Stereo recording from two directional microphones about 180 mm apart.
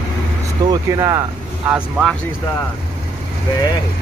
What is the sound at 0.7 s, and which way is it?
Speech, 20° right (ahead or behind).